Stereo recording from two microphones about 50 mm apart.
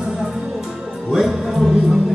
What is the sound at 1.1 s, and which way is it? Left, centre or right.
Music, centre.